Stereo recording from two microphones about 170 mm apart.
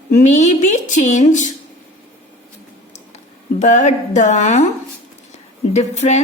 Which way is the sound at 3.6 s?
45° left (ahead or behind).